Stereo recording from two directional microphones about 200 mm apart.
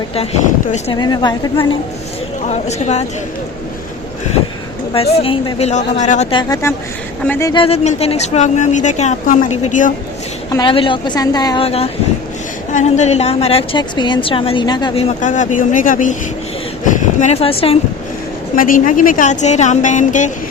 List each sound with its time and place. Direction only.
0.9 s a woman's voice: 20° left (ahead or behind)
2.5 s speech: 35° left (ahead or behind)
5.2 s speech: 25° left (ahead or behind)
6.3 s speech: 15° left (ahead or behind)
7.5 s speech: 30° left (ahead or behind)
10.5 s a woman's voice: 25° left (ahead or behind)
18.5 s speech: 45° left (ahead or behind)